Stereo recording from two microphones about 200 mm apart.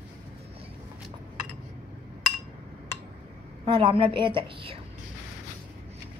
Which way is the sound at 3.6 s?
25° right (ahead or behind).